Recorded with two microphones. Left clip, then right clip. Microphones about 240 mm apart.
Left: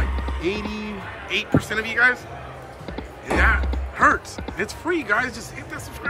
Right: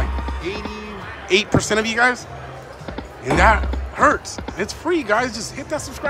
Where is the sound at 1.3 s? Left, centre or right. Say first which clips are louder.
Right 6 dB; centre.